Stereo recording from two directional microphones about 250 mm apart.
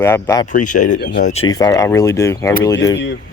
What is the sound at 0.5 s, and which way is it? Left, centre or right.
Speech, left.